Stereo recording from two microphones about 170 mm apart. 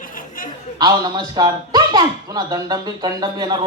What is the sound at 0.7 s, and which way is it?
A man's voice, 25° right (ahead or behind).